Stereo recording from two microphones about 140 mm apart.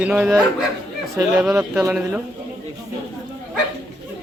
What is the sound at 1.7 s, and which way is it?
Speech, 20° right (ahead or behind).